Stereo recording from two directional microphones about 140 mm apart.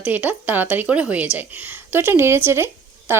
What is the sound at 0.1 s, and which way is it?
Speech, 10° right (ahead or behind).